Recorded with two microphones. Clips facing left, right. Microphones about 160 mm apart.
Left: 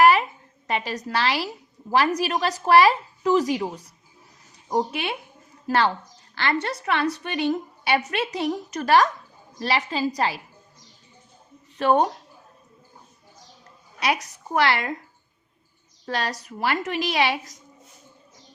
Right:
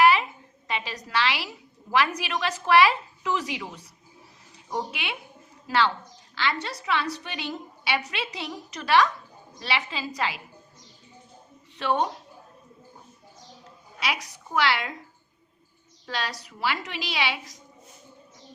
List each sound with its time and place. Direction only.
0.0 s a sound: 45° left (ahead or behind)
0.7 s a woman's voice: 45° left (ahead or behind)
11.8 s a woman's voice: 50° left (ahead or behind)
14.0 s a woman's voice: 45° left (ahead or behind)
16.0 s a woman's voice: 45° left (ahead or behind)